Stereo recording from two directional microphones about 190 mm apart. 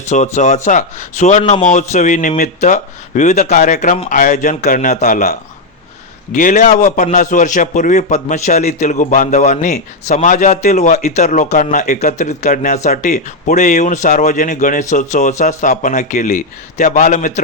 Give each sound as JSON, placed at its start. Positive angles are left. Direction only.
{"t": 0.1, "sound": "a man's voice", "side_deg": 40}